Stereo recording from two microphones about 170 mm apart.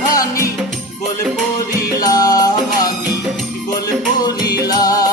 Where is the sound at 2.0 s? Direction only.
20° left (ahead or behind).